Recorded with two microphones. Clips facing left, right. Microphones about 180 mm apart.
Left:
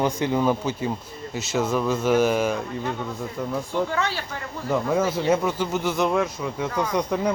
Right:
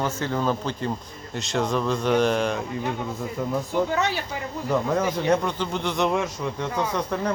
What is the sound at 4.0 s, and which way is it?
Speech, 20° right (ahead or behind).